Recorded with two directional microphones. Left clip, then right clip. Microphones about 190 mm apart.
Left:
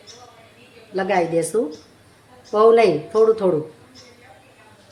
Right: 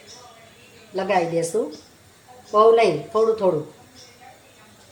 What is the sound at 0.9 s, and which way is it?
Speech, 20° left (ahead or behind).